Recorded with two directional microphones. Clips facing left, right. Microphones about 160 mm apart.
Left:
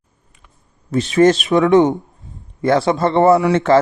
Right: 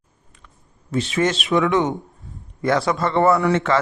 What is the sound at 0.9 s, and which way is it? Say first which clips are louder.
A man's voice: left 8 dB; 40° left (ahead or behind).